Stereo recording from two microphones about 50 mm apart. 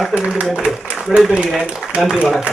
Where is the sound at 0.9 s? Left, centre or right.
Centre.